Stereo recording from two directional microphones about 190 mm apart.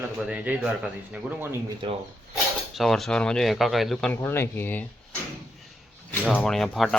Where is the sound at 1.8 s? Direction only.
25° right (ahead or behind).